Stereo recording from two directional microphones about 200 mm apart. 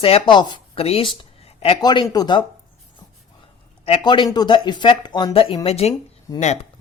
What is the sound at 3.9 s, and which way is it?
Speech, 25° left (ahead or behind).